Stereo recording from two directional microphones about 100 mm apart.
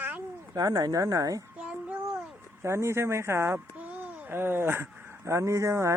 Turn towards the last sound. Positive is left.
turn(degrees=-30)  # may be behind; listen again after turning